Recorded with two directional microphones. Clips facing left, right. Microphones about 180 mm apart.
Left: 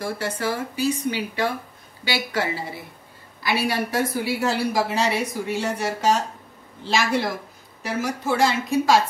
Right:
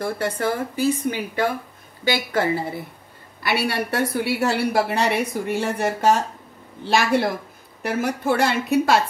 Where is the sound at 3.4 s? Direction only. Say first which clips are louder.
Even; 65° right (ahead or behind).